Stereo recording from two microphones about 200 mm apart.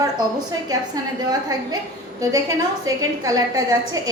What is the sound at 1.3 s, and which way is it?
Speech, 20° right (ahead or behind).